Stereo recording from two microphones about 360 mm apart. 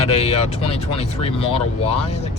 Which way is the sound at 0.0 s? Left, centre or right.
Centre.